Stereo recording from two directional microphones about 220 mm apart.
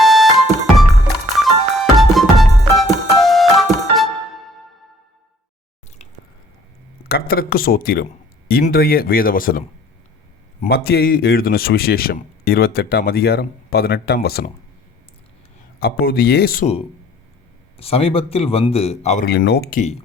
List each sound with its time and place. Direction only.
0.0 s music: centre (ahead or behind)
7.1 s a man's voice: 45° left (ahead or behind)
15.8 s a man's voice: 45° left (ahead or behind)
17.7 s a man's voice: 25° left (ahead or behind)
19.2 s a man's voice: 45° left (ahead or behind)